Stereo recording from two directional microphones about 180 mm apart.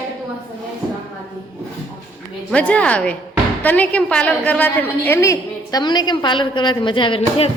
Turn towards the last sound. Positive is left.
turn(degrees=30)  # may be behind; listen again after turning